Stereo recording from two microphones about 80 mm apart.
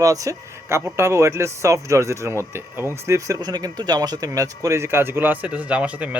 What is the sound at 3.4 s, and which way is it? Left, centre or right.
Speech, right.